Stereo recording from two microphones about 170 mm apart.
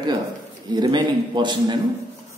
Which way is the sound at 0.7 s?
25° right (ahead or behind).